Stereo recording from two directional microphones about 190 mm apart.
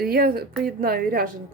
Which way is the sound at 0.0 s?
55° right (ahead or behind).